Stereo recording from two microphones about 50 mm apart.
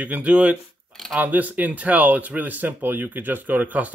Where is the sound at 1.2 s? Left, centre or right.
Right.